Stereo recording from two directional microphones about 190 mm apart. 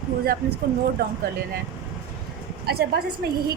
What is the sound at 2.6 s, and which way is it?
Speech, 55° right (ahead or behind).